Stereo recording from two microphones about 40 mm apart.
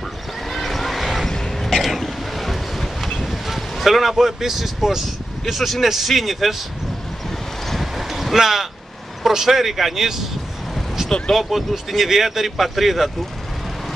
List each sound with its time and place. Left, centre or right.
0.5 s vehicle: centre
1.2 s vehicle: centre
1.8 s a sound: centre
3.3 s speech: centre
5.4 s speech: centre
7.2 s vehicle: centre
9.3 s speech: centre
11.1 s speech: centre
11.3 s speech: centre